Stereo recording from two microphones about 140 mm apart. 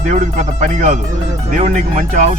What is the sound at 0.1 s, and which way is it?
Speech, 60° right (ahead or behind).